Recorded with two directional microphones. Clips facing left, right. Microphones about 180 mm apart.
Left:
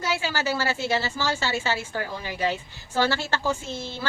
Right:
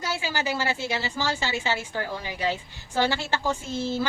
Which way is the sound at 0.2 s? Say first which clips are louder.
Left 1 dB; 15° right (ahead or behind).